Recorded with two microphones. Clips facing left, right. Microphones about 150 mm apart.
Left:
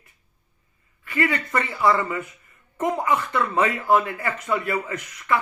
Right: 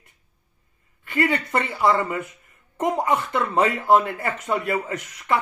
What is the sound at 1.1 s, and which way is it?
Speech, 35° right (ahead or behind).